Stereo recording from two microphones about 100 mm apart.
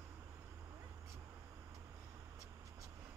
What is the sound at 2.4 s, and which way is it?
Vehicle, 35° right (ahead or behind).